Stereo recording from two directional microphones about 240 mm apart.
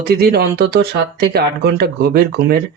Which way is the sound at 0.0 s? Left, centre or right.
Right.